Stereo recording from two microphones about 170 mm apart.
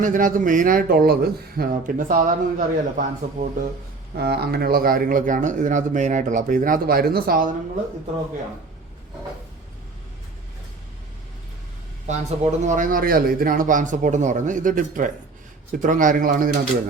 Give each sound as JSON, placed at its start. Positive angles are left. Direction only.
{"t": 0.0, "sound": "speech", "side_deg": -50}
{"t": 4.2, "sound": "speech", "side_deg": -70}
{"t": 12.0, "sound": "speech", "side_deg": -45}